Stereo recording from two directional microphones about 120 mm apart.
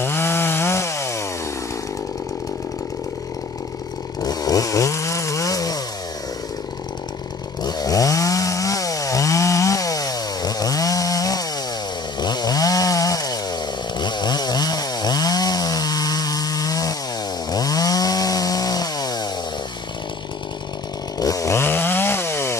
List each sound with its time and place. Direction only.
0.0 s chainsaw: 20° left (ahead or behind)
4.2 s chainsaw: 30° left (ahead or behind)
7.6 s chainsaw: 30° left (ahead or behind)
21.2 s chainsaw: 30° left (ahead or behind)